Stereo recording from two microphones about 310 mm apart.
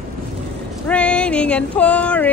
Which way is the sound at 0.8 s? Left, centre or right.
Centre.